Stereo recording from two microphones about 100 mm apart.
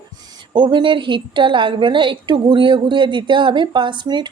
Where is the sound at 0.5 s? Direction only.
50° right (ahead or behind).